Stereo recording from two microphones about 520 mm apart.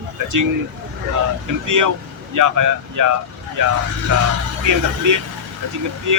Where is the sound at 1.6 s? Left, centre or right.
Right.